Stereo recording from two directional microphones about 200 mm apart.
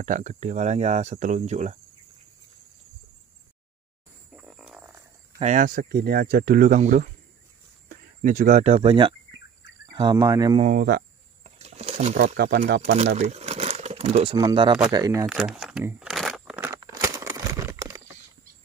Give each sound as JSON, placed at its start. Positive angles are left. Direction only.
{"t": 0.0, "sound": "speech", "side_deg": -40}
{"t": 4.4, "sound": "a sound", "side_deg": 0}
{"t": 5.4, "sound": "speech", "side_deg": -40}
{"t": 10.6, "sound": "speech", "side_deg": -45}
{"t": 11.4, "sound": "a sound", "side_deg": -30}
{"t": 12.2, "sound": "speech", "side_deg": -55}
{"t": 12.9, "sound": "crumpling", "side_deg": -35}
{"t": 14.3, "sound": "speech", "side_deg": -25}
{"t": 15.2, "sound": "crumpling", "side_deg": -5}
{"t": 16.9, "sound": "a sound", "side_deg": -15}